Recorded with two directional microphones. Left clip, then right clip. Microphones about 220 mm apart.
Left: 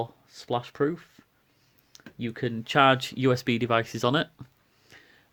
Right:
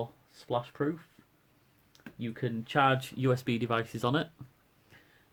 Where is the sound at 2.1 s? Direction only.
40° left (ahead or behind).